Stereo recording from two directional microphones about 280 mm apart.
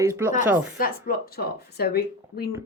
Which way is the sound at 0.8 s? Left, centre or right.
Left.